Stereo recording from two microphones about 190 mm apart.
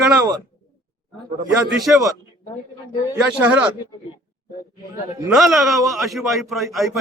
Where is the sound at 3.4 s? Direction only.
5° right (ahead or behind).